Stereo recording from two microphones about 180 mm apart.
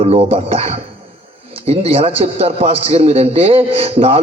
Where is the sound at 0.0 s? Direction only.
35° right (ahead or behind).